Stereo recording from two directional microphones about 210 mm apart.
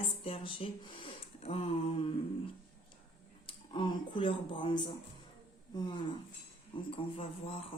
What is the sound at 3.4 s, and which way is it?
Speech, 25° left (ahead or behind).